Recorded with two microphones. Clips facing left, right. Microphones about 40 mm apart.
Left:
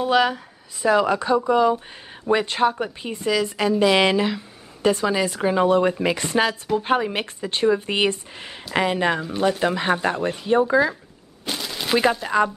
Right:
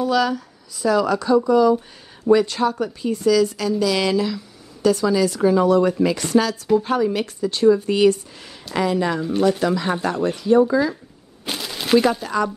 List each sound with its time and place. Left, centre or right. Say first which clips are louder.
0.0 s speech: even; left
11.4 s a sound: even; centre
12.0 s speech: even; left